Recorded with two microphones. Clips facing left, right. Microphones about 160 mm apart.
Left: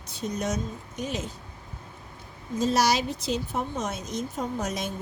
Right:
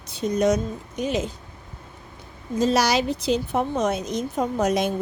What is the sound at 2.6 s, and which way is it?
Speech, 75° right (ahead or behind).